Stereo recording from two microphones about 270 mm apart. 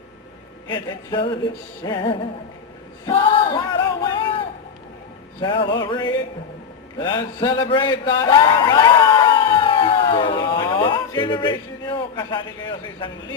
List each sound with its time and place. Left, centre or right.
0.7 s music: centre
7.0 s a man's voice: centre